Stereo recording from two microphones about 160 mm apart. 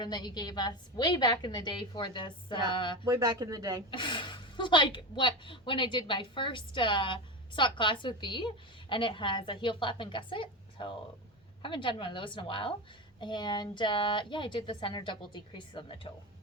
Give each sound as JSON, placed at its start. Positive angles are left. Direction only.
{"t": 0.0, "sound": "a woman's voice", "side_deg": 25}
{"t": 3.1, "sound": "speech", "side_deg": -25}
{"t": 3.9, "sound": "a woman's voice", "side_deg": 30}